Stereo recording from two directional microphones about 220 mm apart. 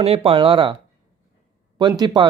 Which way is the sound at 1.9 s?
15° right (ahead or behind).